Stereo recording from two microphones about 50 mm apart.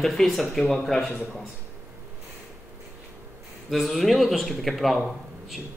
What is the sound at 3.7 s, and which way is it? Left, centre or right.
Speech, centre.